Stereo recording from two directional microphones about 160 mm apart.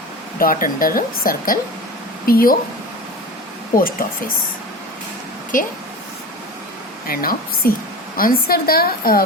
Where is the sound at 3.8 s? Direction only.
65° left (ahead or behind).